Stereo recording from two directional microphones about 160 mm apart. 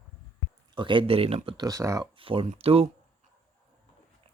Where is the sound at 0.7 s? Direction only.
30° right (ahead or behind).